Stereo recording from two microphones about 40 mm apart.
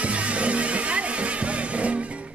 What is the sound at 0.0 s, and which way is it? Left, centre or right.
Music, right.